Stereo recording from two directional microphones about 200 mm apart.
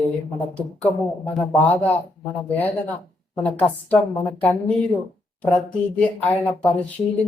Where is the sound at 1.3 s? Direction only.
5° left (ahead or behind).